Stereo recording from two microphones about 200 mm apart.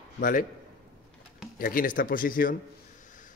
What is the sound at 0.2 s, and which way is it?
Speech, 40° left (ahead or behind).